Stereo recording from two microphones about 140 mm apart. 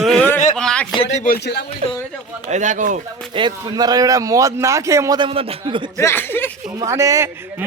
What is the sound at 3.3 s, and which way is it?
Speech, 35° right (ahead or behind).